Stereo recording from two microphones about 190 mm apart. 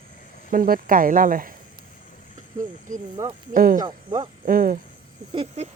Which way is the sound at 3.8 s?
20° right (ahead or behind).